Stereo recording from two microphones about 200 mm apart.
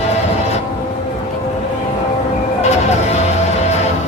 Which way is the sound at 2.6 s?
35° left (ahead or behind).